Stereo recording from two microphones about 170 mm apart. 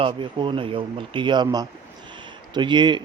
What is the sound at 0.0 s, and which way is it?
Speech, 30° right (ahead or behind).